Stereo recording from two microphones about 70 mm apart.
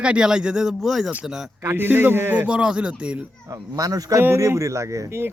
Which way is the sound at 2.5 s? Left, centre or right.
Centre.